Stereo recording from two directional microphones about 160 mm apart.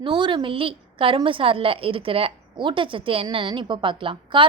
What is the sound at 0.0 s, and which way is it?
A woman's voice, 30° right (ahead or behind).